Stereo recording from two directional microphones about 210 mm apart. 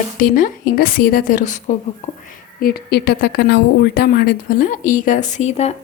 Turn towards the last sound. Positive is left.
turn(degrees=30)  # may be behind; listen again after turning